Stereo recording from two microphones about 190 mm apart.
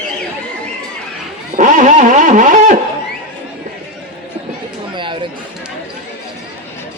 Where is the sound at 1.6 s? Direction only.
40° right (ahead or behind).